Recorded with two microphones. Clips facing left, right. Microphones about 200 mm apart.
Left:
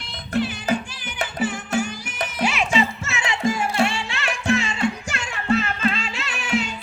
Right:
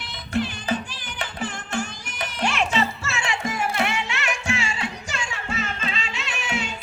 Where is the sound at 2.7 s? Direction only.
20° left (ahead or behind); by 4.9 s 35° left (ahead or behind).